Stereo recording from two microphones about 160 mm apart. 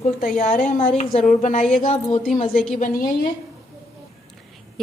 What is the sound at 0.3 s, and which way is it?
A woman's voice, 50° left (ahead or behind).